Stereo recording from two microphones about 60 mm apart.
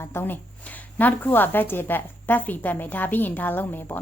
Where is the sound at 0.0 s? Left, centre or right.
Left.